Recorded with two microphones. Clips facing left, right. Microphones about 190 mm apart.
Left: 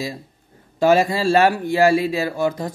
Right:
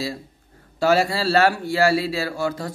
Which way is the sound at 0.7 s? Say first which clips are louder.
Left 3 dB; 20° left (ahead or behind).